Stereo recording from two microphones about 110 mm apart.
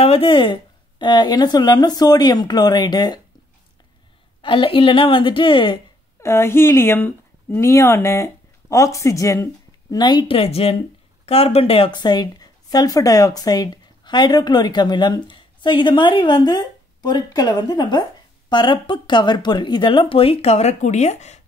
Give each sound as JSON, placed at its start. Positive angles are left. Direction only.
{"t": 0.0, "sound": "speech", "side_deg": 60}
{"t": 4.4, "sound": "speech", "side_deg": 50}
{"t": 6.2, "sound": "speech", "side_deg": 25}
{"t": 10.3, "sound": "speech", "side_deg": 65}
{"t": 11.9, "sound": "speech", "side_deg": 40}